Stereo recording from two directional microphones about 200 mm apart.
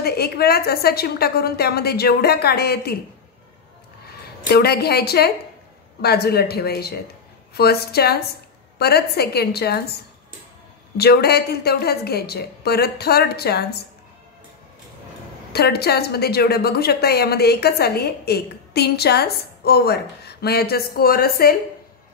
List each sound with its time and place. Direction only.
0.0 s a woman's voice: 50° left (ahead or behind)
4.5 s a woman's voice: 50° left (ahead or behind)
11.0 s a woman's voice: 55° left (ahead or behind)
15.5 s a woman's voice: 55° left (ahead or behind)